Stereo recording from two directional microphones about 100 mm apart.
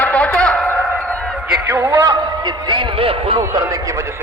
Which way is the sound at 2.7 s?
60° right (ahead or behind).